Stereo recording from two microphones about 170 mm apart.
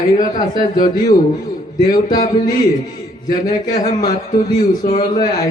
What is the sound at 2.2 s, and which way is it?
Speech, 50° left (ahead or behind).